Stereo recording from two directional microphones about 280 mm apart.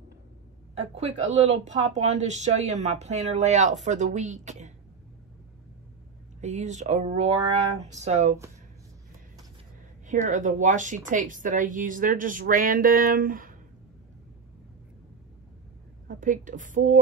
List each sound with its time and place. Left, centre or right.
0.7 s a woman's voice: right
6.4 s a woman's voice: right
10.0 s a woman's voice: right
16.1 s a woman's voice: right